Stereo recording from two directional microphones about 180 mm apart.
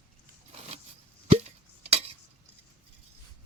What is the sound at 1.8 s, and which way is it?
Cutlery, 35° right (ahead or behind).